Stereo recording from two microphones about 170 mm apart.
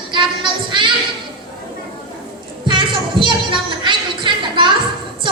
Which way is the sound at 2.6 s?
30° right (ahead or behind).